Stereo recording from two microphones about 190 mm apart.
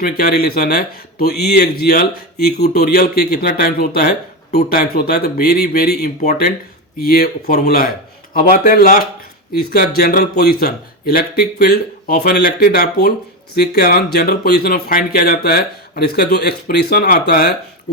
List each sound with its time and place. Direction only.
0.0 s speech: 55° left (ahead or behind)